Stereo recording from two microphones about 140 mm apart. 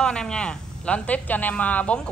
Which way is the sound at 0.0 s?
5° left (ahead or behind).